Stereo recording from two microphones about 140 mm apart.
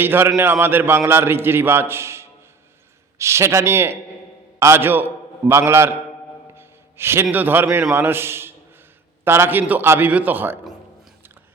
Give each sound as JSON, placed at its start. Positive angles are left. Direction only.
{"t": 0.0, "sound": "a man's voice", "side_deg": -15}